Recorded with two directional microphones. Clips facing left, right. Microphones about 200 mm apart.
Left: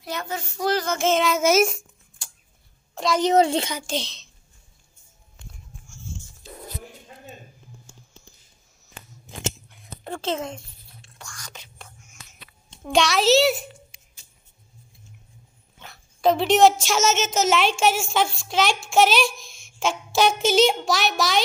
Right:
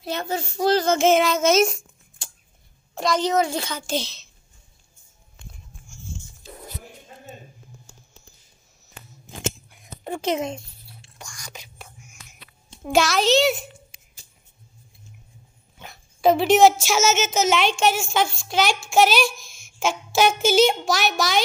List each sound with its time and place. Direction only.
0.0 s child singing: 30° right (ahead or behind)
1.1 s child singing: 5° left (ahead or behind)
2.9 s a sound: centre (ahead or behind)
3.3 s a woman's voice: 25° left (ahead or behind)
3.8 s child singing: 5° right (ahead or behind)
9.7 s a sound: 15° right (ahead or behind)
11.1 s whispering: 10° right (ahead or behind)
15.8 s speech: 10° right (ahead or behind)